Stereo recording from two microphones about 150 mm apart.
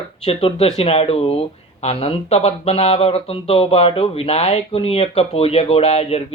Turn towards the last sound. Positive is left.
turn(degrees=40)  # may be behind; listen again after turning